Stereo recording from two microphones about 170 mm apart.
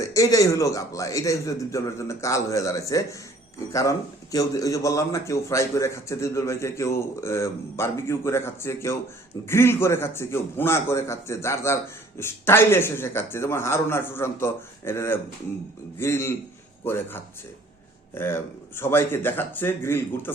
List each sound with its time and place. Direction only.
0.0 s a man's voice: 20° left (ahead or behind)